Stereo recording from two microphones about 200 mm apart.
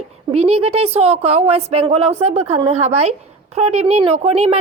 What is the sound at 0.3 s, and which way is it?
A woman's voice, 30° right (ahead or behind).